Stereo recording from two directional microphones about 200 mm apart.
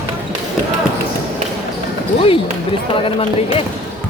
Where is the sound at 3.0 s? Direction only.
30° left (ahead or behind).